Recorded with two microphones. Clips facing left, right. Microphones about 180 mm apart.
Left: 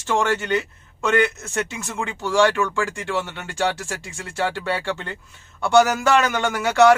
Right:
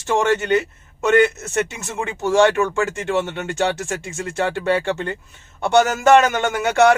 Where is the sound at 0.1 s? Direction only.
20° right (ahead or behind).